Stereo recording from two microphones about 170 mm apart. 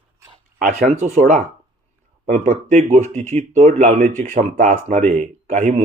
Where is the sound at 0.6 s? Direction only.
45° right (ahead or behind).